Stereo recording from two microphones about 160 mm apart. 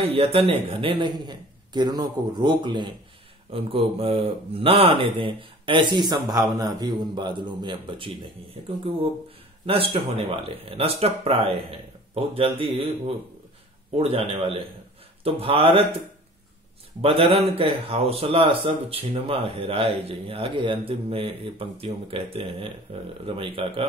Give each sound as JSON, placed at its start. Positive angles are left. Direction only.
{"t": 0.0, "sound": "a man's voice", "side_deg": -35}
{"t": 9.7, "sound": "a man's voice", "side_deg": -35}
{"t": 13.9, "sound": "a man's voice", "side_deg": -35}
{"t": 17.0, "sound": "a man's voice", "side_deg": -35}